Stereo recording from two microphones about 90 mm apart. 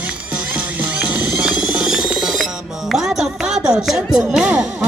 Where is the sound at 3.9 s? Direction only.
10° right (ahead or behind).